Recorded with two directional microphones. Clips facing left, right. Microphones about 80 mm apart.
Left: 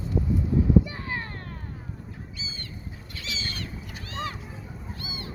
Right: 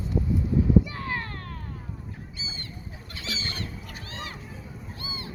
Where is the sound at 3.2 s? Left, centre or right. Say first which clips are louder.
Right 1 dB; right.